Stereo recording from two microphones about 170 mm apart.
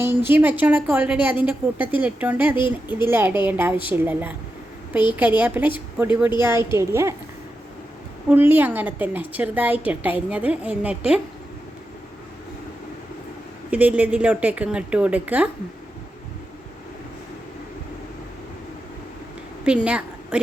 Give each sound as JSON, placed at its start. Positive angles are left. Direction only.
{"t": 0.0, "sound": "a woman's voice", "side_deg": -15}
{"t": 2.6, "sound": "a woman's voice", "side_deg": 30}
{"t": 3.0, "sound": "a woman's voice", "side_deg": -15}
{"t": 8.3, "sound": "a woman's voice", "side_deg": -10}
{"t": 13.7, "sound": "a woman's voice", "side_deg": -10}
{"t": 19.6, "sound": "a woman's voice", "side_deg": -5}